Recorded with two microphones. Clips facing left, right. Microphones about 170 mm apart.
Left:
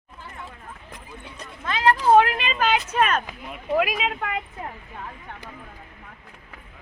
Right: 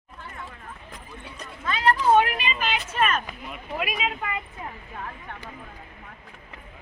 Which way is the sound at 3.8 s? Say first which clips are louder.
Left 1 dB; 90° left.